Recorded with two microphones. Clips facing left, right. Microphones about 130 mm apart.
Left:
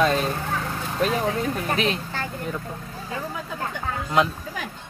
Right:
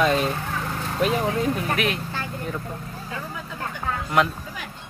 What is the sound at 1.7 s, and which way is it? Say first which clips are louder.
Speech: left 1 dB; 25° left (ahead or behind).